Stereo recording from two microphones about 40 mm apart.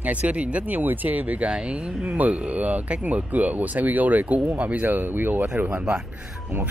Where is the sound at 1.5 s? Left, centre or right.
Right.